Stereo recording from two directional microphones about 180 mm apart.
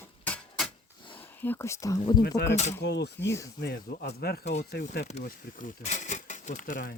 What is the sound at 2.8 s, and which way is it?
Speech, 70° left (ahead or behind).